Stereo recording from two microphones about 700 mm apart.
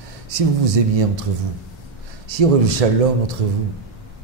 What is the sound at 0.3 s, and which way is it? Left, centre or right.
Speech, right.